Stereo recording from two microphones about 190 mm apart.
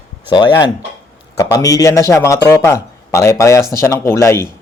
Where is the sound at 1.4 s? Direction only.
20° left (ahead or behind).